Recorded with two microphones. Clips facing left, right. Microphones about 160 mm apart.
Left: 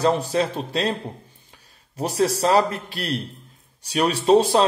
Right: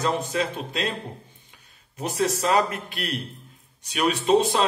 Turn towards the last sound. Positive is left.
turn(degrees=35)  # may be behind; listen again after turning